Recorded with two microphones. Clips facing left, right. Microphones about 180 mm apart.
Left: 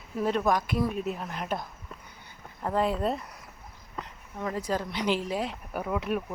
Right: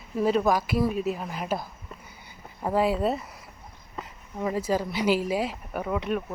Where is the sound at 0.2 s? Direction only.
5° right (ahead or behind).